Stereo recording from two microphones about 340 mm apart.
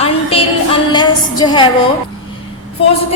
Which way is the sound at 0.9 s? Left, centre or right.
Centre.